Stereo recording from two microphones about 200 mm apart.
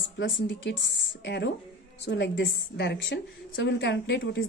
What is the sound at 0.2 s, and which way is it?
A woman's voice, 65° left (ahead or behind).